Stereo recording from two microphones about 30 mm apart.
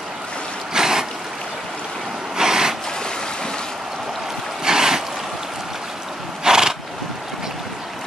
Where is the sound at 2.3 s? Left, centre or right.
Right.